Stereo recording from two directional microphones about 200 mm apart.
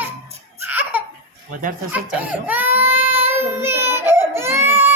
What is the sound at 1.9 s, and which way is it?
Baby cry, 10° right (ahead or behind).